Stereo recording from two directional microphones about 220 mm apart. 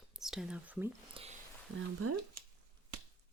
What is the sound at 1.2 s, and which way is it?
Speech, 25° right (ahead or behind).